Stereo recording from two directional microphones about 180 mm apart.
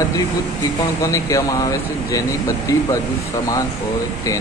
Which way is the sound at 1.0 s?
20° left (ahead or behind).